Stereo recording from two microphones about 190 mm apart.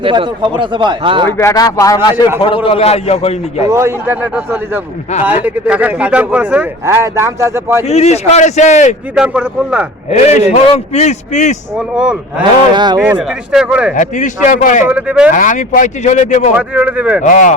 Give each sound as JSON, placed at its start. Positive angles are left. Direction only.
{"t": 0.0, "sound": "a man's voice", "side_deg": -25}
{"t": 1.4, "sound": "speech", "side_deg": 15}
{"t": 2.6, "sound": "a man's voice", "side_deg": 30}
{"t": 3.7, "sound": "speech", "side_deg": -15}
{"t": 7.9, "sound": "a man's voice", "side_deg": 35}
{"t": 9.1, "sound": "speech", "side_deg": -5}
{"t": 10.1, "sound": "a man's voice", "side_deg": 35}
{"t": 12.4, "sound": "a man's voice", "side_deg": -25}
{"t": 13.0, "sound": "speech", "side_deg": -5}
{"t": 13.9, "sound": "a man's voice", "side_deg": 40}
{"t": 14.8, "sound": "speech", "side_deg": -5}
{"t": 15.3, "sound": "a man's voice", "side_deg": 40}
{"t": 16.6, "sound": "speech", "side_deg": -10}
{"t": 17.2, "sound": "a man's voice", "side_deg": 40}